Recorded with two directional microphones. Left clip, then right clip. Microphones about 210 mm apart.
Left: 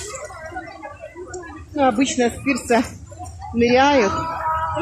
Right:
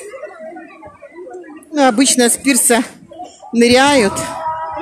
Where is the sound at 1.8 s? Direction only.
45° right (ahead or behind).